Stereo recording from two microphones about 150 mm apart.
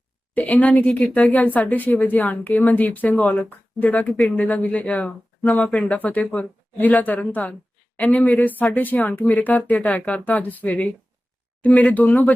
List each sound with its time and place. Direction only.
0.3 s speech: 10° left (ahead or behind)